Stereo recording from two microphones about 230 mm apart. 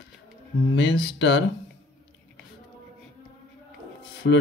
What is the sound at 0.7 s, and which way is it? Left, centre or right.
Speech, left.